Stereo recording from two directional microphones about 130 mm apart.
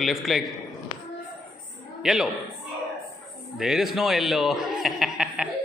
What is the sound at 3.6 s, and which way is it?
Speech, centre (ahead or behind).